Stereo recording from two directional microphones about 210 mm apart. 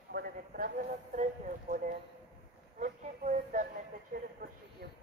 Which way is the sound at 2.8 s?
35° right (ahead or behind).